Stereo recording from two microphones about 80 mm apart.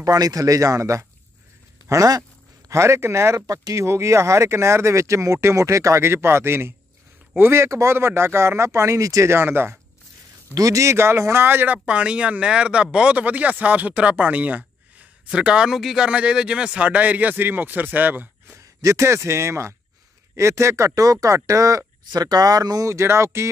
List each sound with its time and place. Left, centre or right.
0.0 s speech: right
2.7 s speech: right
10.5 s speech: right
18.8 s speech: right